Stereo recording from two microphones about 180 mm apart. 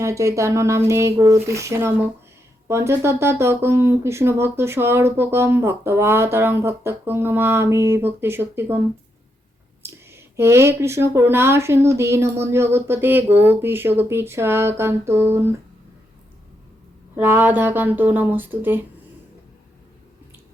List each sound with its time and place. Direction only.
0.0 s speech: 15° right (ahead or behind)
17.2 s speech: 10° right (ahead or behind)